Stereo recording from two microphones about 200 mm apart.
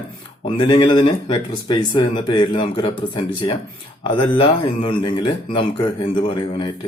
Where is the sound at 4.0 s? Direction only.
25° left (ahead or behind).